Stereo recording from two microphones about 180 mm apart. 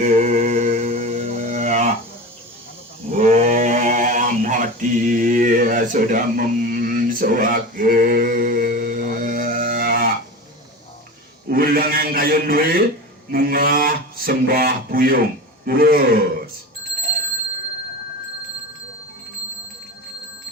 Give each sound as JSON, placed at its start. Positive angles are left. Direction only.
{"t": 0.0, "sound": "mantra", "side_deg": -45}
{"t": 3.1, "sound": "sheep", "side_deg": -40}
{"t": 11.4, "sound": "a sound", "side_deg": -55}